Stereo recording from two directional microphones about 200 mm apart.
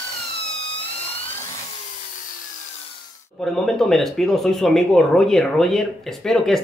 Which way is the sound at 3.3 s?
Centre (ahead or behind).